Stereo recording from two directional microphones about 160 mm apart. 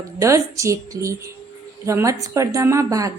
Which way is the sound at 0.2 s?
20° right (ahead or behind).